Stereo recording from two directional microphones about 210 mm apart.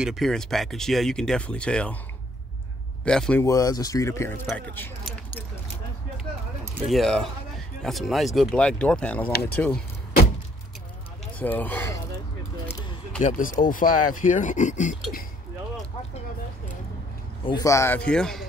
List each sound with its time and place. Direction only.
0.0 s speech: centre (ahead or behind)
3.1 s speech: 5° left (ahead or behind)
3.4 s speech: 15° left (ahead or behind)
6.1 s a sound: centre (ahead or behind)
7.8 s speech: centre (ahead or behind)
11.3 s speech: 10° left (ahead or behind)
12.6 s a sound: 15° left (ahead or behind)
13.2 s speech: 40° left (ahead or behind)
17.5 s speech: 15° left (ahead or behind)